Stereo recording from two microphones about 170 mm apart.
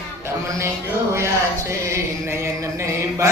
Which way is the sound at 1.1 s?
15° right (ahead or behind).